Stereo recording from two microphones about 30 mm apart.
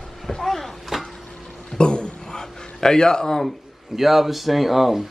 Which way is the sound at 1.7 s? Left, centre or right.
Left.